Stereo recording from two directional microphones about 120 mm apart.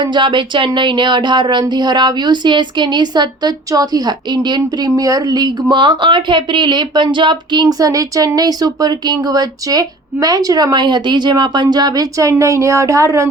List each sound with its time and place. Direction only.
0.0 s speech: 40° right (ahead or behind)